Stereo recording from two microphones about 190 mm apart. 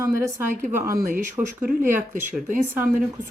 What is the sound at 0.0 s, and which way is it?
Speech, 15° right (ahead or behind).